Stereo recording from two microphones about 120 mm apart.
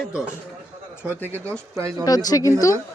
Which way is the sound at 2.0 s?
30° left (ahead or behind).